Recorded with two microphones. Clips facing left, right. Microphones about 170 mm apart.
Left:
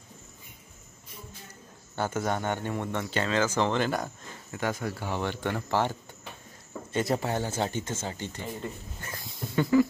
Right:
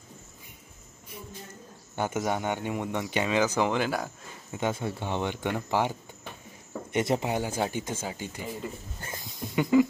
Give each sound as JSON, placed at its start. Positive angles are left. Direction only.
{"t": 2.0, "sound": "speech", "side_deg": -15}
{"t": 4.5, "sound": "speech", "side_deg": -20}
{"t": 9.0, "sound": "a sound", "side_deg": -20}